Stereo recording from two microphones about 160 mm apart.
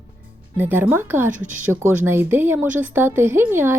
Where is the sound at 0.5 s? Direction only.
15° right (ahead or behind).